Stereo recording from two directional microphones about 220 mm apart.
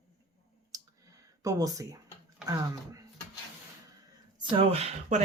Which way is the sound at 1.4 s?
15° right (ahead or behind).